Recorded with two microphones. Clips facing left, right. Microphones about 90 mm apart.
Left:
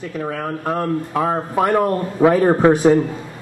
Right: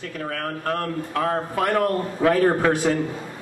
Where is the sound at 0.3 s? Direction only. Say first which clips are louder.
Left 2 dB; 15° left (ahead or behind).